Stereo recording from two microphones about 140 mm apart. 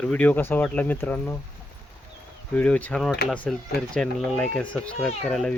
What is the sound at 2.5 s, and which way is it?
Speech, 10° left (ahead or behind).